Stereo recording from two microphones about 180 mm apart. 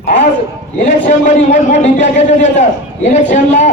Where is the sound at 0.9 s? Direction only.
40° left (ahead or behind).